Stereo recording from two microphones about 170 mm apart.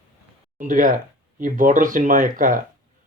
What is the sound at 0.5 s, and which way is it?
Speech, 50° right (ahead or behind).